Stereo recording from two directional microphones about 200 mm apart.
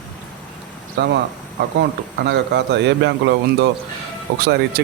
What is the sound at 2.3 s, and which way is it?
A man's voice, 60° right (ahead or behind).